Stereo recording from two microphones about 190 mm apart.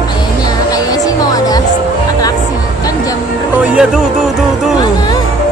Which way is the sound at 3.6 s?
5° right (ahead or behind).